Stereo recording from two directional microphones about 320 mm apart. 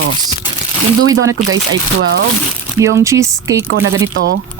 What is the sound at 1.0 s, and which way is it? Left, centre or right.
Speech, right.